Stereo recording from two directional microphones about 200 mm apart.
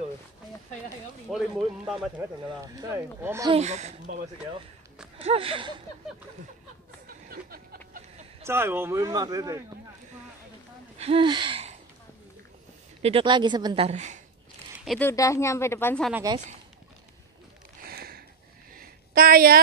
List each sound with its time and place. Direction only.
1.3 s speech: 5° right (ahead or behind)
2.4 s speech: 15° right (ahead or behind)
3.5 s speech: 35° right (ahead or behind)
5.2 s speech: 30° right (ahead or behind)
7.2 s vehicle: 50° right (ahead or behind)
8.5 s speech: 10° right (ahead or behind)
11.0 s a sound: 25° right (ahead or behind)
13.0 s speech: 25° right (ahead or behind)
14.9 s speech: 10° left (ahead or behind)
17.8 s a sound: 50° right (ahead or behind)